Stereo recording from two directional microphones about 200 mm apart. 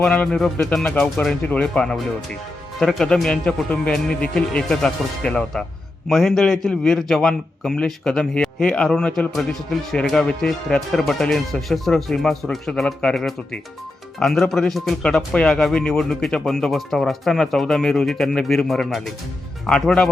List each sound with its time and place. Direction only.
0.0 s speech: 5° left (ahead or behind)